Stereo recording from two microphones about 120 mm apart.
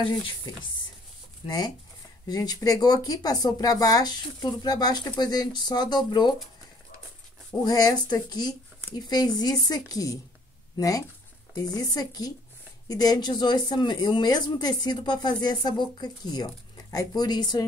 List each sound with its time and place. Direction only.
2.2 s speech: 35° left (ahead or behind)
7.6 s speech: 35° left (ahead or behind)